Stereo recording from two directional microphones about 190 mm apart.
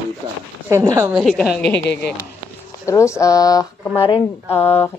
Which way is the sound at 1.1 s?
Centre (ahead or behind).